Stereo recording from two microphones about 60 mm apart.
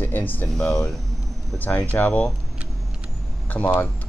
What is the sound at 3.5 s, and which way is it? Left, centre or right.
Speech, left.